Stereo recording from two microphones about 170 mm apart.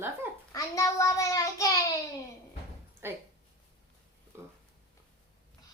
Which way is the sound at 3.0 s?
15° right (ahead or behind).